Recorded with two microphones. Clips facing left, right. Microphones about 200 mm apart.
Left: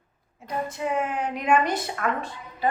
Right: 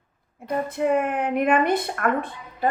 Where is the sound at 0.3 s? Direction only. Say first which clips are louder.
Right 5 dB; 55° right (ahead or behind).